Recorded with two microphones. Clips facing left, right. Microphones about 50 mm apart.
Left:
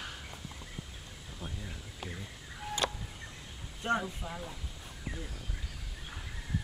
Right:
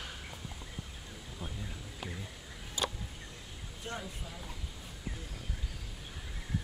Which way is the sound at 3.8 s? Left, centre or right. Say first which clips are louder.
Left 10 dB; left.